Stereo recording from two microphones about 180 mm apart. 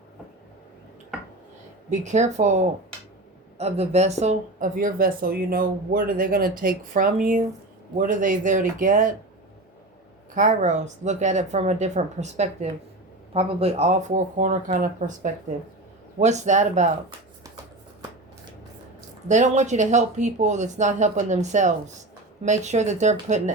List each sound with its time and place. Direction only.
1.9 s speech: 40° right (ahead or behind)
10.3 s speech: 45° right (ahead or behind)
19.3 s speech: 40° right (ahead or behind)